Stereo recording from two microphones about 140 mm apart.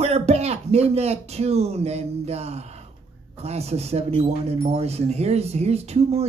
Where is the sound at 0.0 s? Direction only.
50° right (ahead or behind).